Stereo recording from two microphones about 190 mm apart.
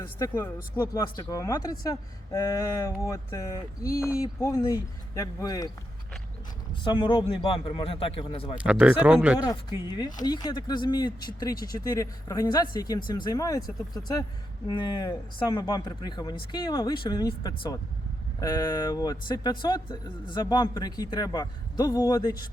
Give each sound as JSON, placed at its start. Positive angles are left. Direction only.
{"t": 0.2, "sound": "speech", "side_deg": 15}
{"t": 6.8, "sound": "speech", "side_deg": 25}
{"t": 8.5, "sound": "speech", "side_deg": -5}
{"t": 9.4, "sound": "speech", "side_deg": 20}